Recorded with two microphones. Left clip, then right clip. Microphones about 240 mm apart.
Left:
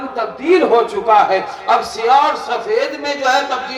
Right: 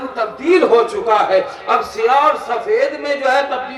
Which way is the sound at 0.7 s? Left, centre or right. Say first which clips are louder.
Left 1 dB; left.